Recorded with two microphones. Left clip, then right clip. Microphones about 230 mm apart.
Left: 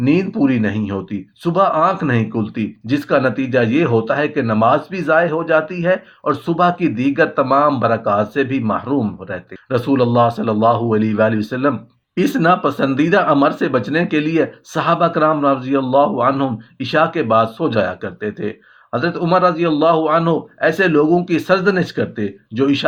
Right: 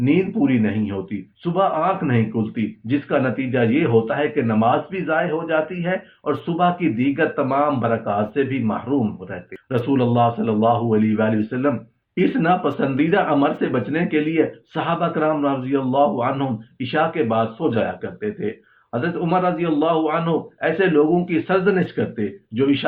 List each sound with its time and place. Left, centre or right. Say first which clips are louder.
0.0 s speech: left 3 dB; left